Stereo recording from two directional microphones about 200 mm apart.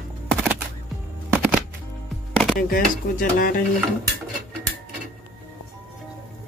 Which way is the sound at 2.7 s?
45° left (ahead or behind).